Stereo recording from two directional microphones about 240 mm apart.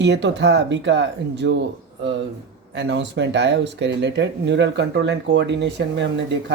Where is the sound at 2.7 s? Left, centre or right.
Right.